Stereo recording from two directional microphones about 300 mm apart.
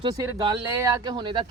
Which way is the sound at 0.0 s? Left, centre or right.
Centre.